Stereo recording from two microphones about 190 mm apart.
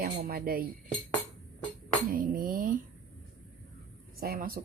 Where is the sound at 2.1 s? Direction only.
50° right (ahead or behind).